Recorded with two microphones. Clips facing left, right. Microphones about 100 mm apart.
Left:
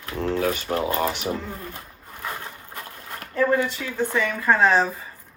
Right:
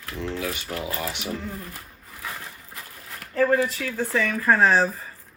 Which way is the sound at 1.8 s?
30° left (ahead or behind).